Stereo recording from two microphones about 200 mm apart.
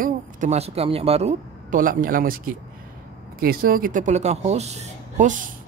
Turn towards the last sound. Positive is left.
turn(degrees=-40)  # may be behind; listen again after turning